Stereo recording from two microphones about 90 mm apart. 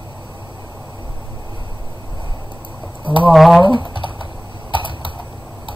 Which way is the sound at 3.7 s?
65° left (ahead or behind).